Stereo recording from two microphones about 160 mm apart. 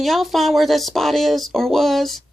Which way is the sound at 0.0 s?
Centre (ahead or behind).